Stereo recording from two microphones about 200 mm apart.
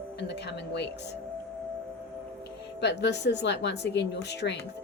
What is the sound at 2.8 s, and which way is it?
Speech, 60° left (ahead or behind).